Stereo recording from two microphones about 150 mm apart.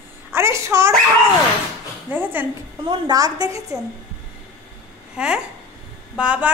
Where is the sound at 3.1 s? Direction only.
25° right (ahead or behind).